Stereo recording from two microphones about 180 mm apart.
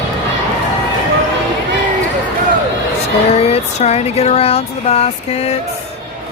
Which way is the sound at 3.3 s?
35° left (ahead or behind).